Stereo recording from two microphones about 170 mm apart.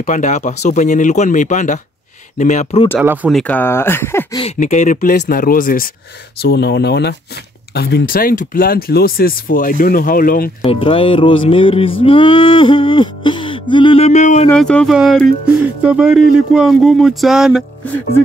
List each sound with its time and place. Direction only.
0.0 s speech: 45° left (ahead or behind)
3.0 s speech: 10° right (ahead or behind); by 4.4 s 15° left (ahead or behind)
4.6 s speech: 45° left (ahead or behind)
5.1 s speech: 65° left (ahead or behind)
6.4 s speech: 75° left (ahead or behind); by 10.5 s 55° left (ahead or behind)
10.6 s music: 30° left (ahead or behind)
14.5 s speech: 5° left (ahead or behind)